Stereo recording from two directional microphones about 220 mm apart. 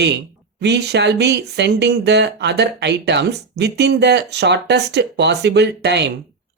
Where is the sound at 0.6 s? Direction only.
50° right (ahead or behind).